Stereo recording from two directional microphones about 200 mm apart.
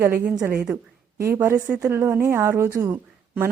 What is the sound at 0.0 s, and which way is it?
A woman's voice, 10° right (ahead or behind).